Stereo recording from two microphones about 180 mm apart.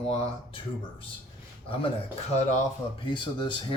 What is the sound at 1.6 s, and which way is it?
Speech, 30° left (ahead or behind).